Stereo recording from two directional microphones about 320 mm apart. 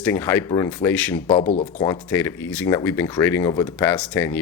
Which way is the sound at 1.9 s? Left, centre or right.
Centre.